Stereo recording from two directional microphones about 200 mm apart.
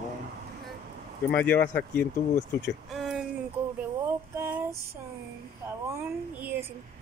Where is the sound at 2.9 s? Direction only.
Centre (ahead or behind).